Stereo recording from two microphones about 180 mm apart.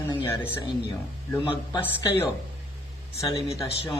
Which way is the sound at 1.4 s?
30° left (ahead or behind).